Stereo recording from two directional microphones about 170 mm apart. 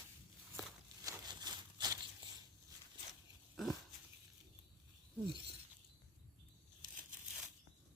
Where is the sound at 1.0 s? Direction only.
25° right (ahead or behind).